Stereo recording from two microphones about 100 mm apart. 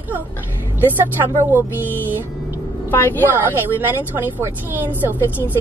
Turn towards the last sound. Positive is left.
turn(degrees=-20)  # may be behind; listen again after turning